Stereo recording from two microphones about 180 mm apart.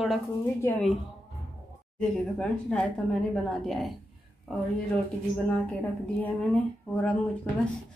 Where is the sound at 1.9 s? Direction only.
5° left (ahead or behind).